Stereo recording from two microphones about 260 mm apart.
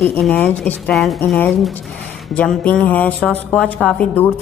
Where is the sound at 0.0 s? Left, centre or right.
Centre.